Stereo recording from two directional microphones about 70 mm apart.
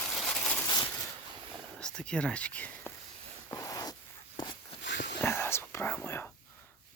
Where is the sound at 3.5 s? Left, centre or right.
Left.